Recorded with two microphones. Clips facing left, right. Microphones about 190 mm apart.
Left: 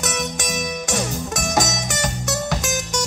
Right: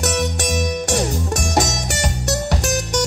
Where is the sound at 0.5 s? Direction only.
35° right (ahead or behind).